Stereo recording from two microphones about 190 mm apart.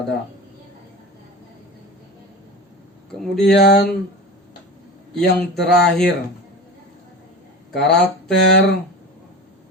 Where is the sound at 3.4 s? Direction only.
60° left (ahead or behind).